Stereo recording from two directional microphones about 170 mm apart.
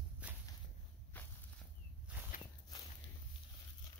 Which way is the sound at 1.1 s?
10° left (ahead or behind).